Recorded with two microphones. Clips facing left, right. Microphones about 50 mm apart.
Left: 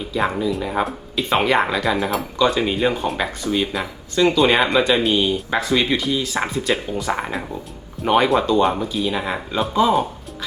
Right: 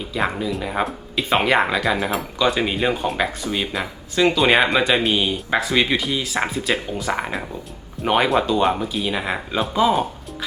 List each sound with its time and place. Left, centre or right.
0.1 s speech: centre